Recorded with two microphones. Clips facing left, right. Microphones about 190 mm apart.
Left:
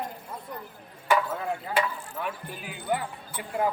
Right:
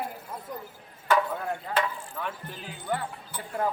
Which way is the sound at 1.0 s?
5° left (ahead or behind).